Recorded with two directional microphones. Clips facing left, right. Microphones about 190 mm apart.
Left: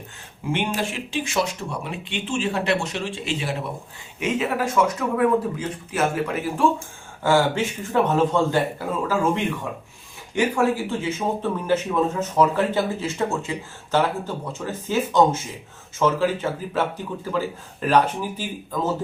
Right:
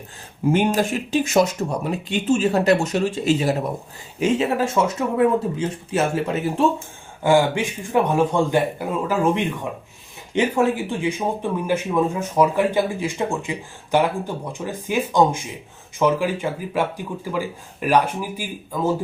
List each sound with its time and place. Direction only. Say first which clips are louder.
0.4 s speech: right 6 dB; 40° right (ahead or behind)
4.2 s speech: right 4 dB; 30° right (ahead or behind)
7.2 s speech: right 2 dB; 15° right (ahead or behind)